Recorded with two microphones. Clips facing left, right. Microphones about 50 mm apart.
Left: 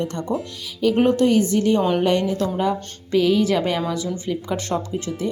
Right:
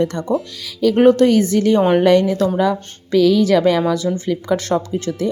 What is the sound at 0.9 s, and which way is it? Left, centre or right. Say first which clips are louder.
A woman's voice: right 5 dB; right.